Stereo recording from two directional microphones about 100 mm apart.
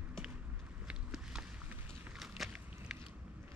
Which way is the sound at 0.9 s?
5° right (ahead or behind).